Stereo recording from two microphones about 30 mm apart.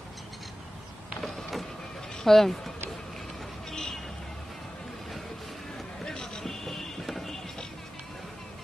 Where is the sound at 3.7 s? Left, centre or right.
Centre.